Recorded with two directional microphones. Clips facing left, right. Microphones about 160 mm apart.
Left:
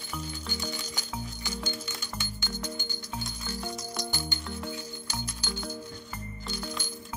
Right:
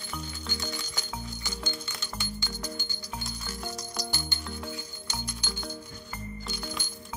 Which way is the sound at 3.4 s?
Centre (ahead or behind).